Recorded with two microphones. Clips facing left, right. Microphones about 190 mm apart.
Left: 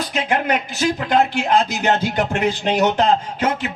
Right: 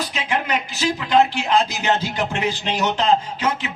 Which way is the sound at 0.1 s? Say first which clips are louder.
Left 4 dB; 55° left (ahead or behind).